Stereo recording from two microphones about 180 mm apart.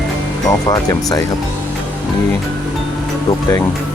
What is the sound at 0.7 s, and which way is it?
Speech, 20° left (ahead or behind).